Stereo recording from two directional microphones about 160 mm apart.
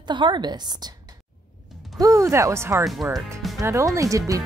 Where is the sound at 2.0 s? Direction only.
20° right (ahead or behind).